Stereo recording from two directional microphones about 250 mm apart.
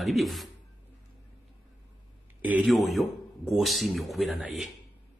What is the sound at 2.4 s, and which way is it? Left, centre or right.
Speech, centre.